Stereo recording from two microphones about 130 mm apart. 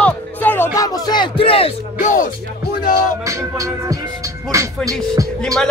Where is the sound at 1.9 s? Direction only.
85° left.